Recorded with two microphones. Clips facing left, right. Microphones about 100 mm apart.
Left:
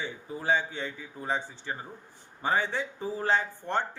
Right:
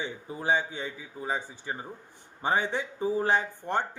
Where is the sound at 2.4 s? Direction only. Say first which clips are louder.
Right 1 dB; 20° right (ahead or behind).